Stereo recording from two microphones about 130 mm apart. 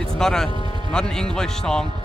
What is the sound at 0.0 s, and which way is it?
Music, 5° left (ahead or behind).